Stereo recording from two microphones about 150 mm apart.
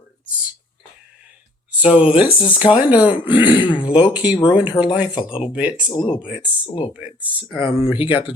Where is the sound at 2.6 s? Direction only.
10° right (ahead or behind).